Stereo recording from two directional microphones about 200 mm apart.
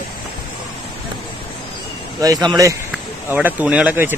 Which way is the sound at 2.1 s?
20° right (ahead or behind).